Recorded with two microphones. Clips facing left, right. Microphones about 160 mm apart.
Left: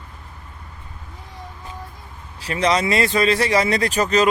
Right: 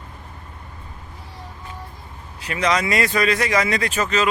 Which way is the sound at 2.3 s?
30° left (ahead or behind).